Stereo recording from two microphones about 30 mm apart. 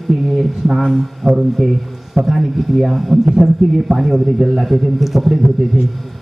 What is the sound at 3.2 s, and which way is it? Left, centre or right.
A man's voice, centre.